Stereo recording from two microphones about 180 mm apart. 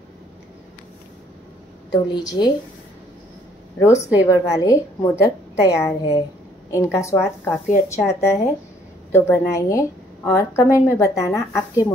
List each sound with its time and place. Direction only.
1.9 s a woman's voice: 25° left (ahead or behind)
4.3 s speech: 20° left (ahead or behind)